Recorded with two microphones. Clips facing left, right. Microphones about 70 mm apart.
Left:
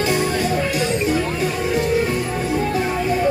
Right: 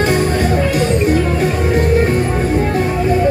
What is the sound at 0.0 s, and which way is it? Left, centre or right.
Music, right.